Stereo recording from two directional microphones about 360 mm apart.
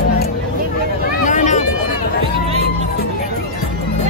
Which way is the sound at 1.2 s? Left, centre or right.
Centre.